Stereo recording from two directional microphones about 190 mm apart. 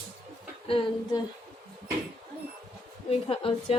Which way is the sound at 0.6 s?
30° left (ahead or behind).